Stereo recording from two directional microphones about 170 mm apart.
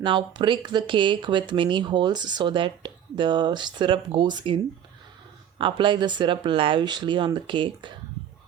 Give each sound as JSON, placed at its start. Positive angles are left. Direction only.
{"t": 0.0, "sound": "speech", "side_deg": -30}